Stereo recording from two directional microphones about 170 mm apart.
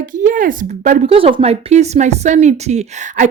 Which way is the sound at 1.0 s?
35° right (ahead or behind).